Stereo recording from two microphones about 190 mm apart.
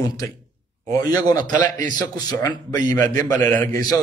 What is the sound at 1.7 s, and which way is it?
Speech, 45° right (ahead or behind).